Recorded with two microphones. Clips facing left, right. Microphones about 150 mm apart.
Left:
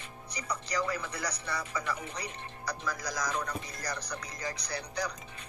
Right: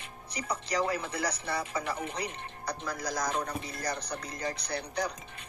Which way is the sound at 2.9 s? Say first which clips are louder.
Right 6 dB; 55° right (ahead or behind).